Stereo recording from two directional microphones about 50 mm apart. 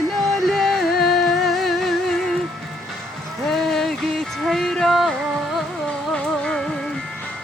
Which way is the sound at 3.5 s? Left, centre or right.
Centre.